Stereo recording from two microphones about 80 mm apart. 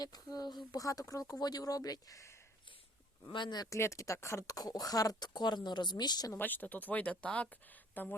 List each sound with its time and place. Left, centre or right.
0.0 s speech: left
1.3 s speech: left
3.3 s speech: left
3.7 s speech: left
6.4 s speech: left